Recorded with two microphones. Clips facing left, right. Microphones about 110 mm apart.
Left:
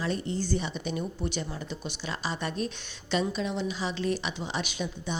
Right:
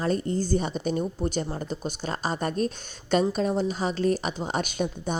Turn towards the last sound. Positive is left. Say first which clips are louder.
# right 5 dB
turn(degrees=-45)  # may be behind; listen again after turning